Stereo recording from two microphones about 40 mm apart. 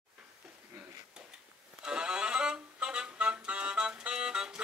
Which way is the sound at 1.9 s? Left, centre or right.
Right.